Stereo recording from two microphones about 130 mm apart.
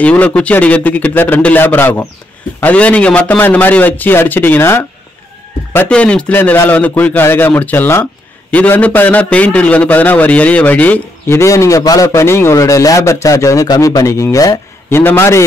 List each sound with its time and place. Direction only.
0.0 s a man's voice: 10° left (ahead or behind)
5.9 s a man's voice: 10° left (ahead or behind)